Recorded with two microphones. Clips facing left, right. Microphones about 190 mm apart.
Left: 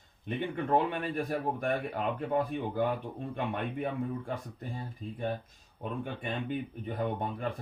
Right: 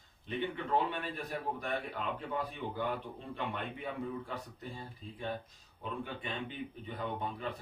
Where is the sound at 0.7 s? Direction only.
50° left (ahead or behind).